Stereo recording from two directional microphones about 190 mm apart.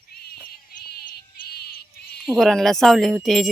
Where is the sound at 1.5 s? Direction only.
55° left (ahead or behind).